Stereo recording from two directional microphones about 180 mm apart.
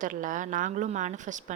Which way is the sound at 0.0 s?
45° right (ahead or behind).